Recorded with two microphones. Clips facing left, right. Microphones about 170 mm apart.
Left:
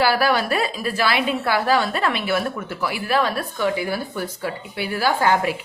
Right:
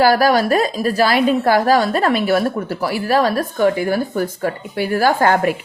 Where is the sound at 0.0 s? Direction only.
40° right (ahead or behind).